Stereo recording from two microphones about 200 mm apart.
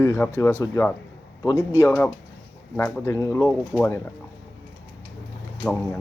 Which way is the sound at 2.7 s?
10° left (ahead or behind).